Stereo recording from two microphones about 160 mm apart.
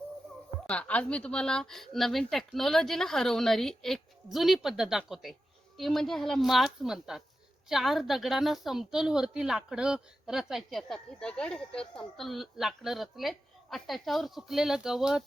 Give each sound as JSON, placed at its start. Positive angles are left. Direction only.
{"t": 0.7, "sound": "a woman's voice", "side_deg": 10}